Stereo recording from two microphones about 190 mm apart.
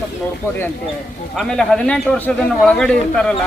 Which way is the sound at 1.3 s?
5° left (ahead or behind).